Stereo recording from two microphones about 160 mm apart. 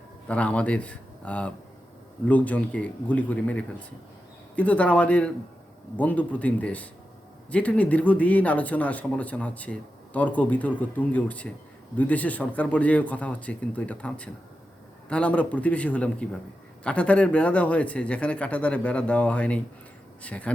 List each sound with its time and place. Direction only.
0.3 s speech: 10° left (ahead or behind)